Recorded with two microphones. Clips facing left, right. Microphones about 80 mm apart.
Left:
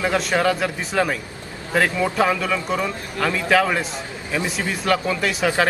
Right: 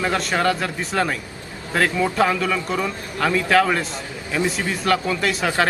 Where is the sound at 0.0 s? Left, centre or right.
Centre.